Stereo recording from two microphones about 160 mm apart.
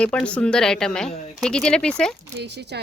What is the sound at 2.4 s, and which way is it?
Speech, 90° right.